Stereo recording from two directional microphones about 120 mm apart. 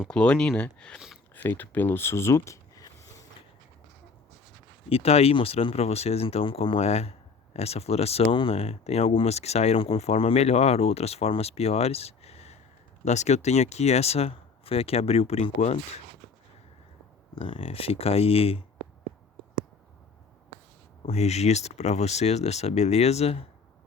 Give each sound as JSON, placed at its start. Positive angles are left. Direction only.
{"t": 0.1, "sound": "speech", "side_deg": 10}
{"t": 4.9, "sound": "speech", "side_deg": 55}
{"t": 17.3, "sound": "speech", "side_deg": 50}
{"t": 21.1, "sound": "speech", "side_deg": 65}